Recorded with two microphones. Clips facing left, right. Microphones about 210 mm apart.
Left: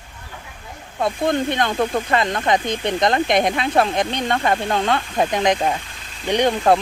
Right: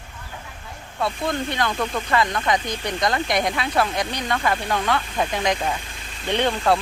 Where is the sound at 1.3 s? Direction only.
20° left (ahead or behind).